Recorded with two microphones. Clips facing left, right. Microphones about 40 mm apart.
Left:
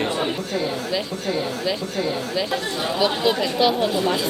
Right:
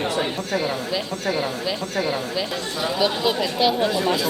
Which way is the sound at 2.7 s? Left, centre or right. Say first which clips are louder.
Even; left.